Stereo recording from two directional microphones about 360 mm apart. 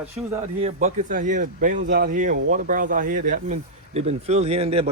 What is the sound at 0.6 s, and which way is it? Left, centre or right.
A man's voice, centre.